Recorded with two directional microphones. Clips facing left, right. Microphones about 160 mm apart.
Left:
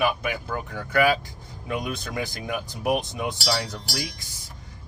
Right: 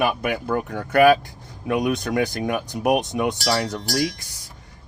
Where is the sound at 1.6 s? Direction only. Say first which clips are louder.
Right 8 dB; 70° right (ahead or behind).